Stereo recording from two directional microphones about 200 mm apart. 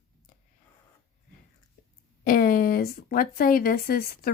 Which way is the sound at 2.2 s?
45° left (ahead or behind).